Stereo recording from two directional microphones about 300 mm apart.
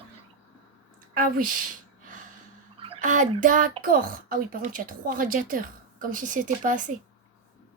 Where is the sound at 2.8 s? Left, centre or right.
Right.